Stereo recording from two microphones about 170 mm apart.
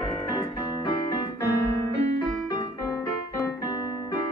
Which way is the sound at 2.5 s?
20° left (ahead or behind).